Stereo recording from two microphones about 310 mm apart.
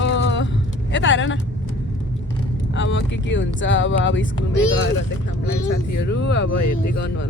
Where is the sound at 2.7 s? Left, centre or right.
Left.